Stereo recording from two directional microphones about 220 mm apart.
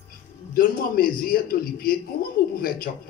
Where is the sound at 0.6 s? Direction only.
40° left (ahead or behind).